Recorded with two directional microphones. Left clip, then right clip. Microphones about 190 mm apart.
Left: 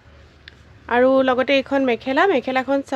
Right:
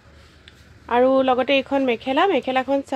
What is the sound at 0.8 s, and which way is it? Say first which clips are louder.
Speech: left 1 dB; 15° left (ahead or behind).